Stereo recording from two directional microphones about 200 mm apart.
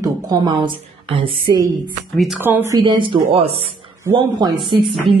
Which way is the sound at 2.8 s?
25° right (ahead or behind).